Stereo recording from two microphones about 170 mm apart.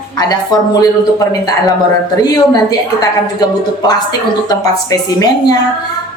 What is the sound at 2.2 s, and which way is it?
A woman's voice, 20° left (ahead or behind).